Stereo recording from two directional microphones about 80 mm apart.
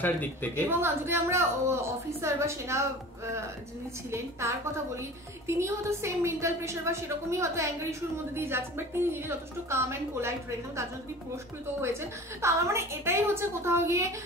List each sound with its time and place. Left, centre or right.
0.0 s a woman's voice: left
0.7 s a woman's voice: right
4.1 s a woman's voice: right
11.8 s a woman's voice: right